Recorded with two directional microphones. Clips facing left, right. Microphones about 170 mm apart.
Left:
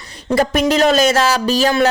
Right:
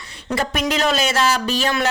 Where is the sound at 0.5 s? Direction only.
40° left (ahead or behind).